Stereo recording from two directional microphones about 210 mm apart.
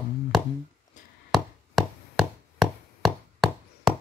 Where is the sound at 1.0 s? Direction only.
35° left (ahead or behind).